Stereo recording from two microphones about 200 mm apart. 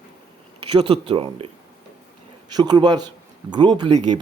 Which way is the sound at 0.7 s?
25° right (ahead or behind).